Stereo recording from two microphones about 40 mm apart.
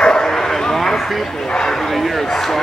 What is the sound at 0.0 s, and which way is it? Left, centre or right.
Bow-wow, centre.